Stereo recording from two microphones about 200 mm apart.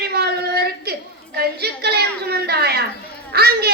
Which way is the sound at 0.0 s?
55° right (ahead or behind).